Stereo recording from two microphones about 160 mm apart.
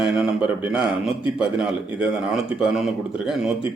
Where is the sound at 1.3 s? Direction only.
5° right (ahead or behind).